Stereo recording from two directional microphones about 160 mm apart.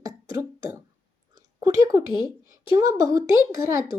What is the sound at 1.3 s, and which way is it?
Speech, 20° right (ahead or behind).